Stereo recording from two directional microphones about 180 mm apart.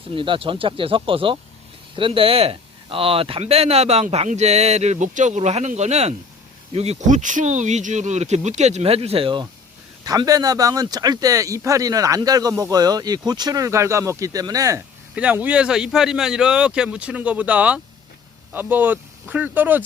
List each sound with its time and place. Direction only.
0.1 s speech: 30° right (ahead or behind)
15.1 s speech: 5° right (ahead or behind)